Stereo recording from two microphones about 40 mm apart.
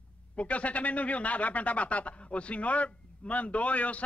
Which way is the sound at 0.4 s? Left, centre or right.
Left.